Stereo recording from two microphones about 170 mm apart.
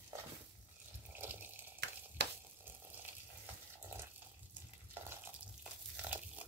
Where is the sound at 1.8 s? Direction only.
75° right (ahead or behind).